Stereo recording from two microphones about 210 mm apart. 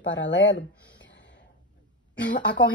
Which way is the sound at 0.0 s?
60° left (ahead or behind).